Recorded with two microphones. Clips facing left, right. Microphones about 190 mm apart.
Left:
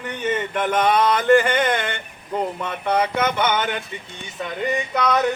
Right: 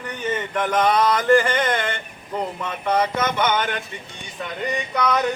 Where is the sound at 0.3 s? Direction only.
10° left (ahead or behind).